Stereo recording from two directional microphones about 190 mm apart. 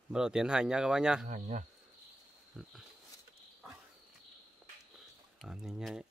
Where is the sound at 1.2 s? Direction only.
40° right (ahead or behind).